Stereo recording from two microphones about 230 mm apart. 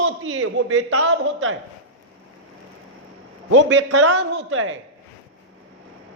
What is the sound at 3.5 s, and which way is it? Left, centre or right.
Speech, right.